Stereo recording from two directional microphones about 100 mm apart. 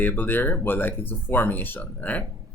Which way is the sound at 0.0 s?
20° left (ahead or behind).